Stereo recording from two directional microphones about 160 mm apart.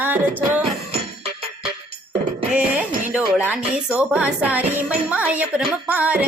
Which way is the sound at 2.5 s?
10° right (ahead or behind).